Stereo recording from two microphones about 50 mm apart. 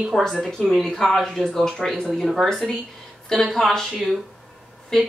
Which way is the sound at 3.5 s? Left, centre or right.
Centre.